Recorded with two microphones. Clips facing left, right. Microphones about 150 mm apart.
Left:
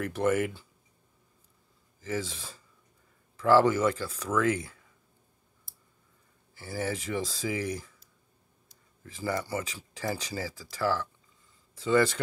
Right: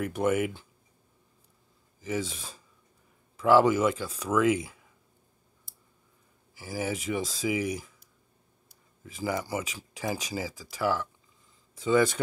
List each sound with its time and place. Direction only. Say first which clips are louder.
0.0 s speech: even; 15° right (ahead or behind)
2.0 s speech: right 2 dB; 15° right (ahead or behind)
6.5 s speech: right 1 dB; 10° right (ahead or behind)
9.0 s speech: right 1 dB; 15° right (ahead or behind)